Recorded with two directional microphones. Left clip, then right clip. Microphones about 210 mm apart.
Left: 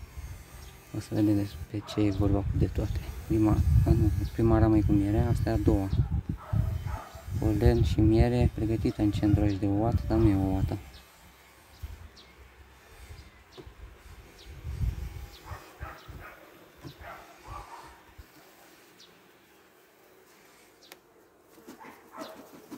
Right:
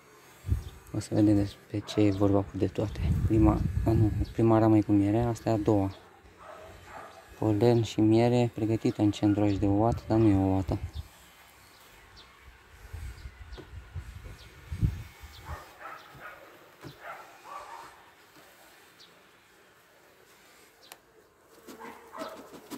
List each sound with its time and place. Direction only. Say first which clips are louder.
0.9 s speech: right 2 dB; 10° right (ahead or behind)
7.4 s speech: right 3 dB; 5° right (ahead or behind)
15.5 s bow-wow: right 2 dB; centre (ahead or behind)
17.5 s a sound: right 2 dB; centre (ahead or behind)
22.1 s dog: right 3 dB; centre (ahead or behind)